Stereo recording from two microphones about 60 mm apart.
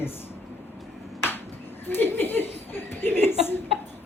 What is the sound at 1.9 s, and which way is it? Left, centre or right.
Speech, left.